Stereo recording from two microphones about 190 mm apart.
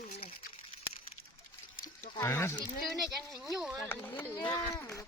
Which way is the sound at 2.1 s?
15° left (ahead or behind).